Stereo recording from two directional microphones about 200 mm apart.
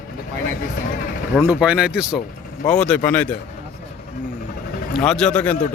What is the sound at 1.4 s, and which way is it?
Speech, 10° right (ahead or behind).